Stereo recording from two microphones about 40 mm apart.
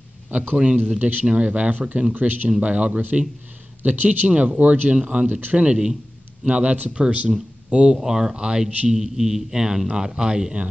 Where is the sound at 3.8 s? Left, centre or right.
Right.